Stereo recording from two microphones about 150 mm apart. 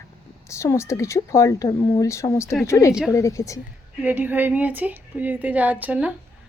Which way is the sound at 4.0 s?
10° right (ahead or behind).